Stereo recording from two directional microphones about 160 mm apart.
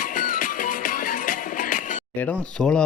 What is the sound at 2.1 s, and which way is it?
Speech, 10° left (ahead or behind).